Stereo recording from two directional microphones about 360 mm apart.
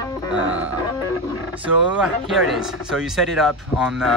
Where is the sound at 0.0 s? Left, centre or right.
Centre.